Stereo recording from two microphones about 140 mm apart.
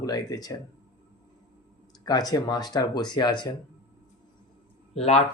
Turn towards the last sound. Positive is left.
turn(degrees=50)  # may be behind; listen again after turning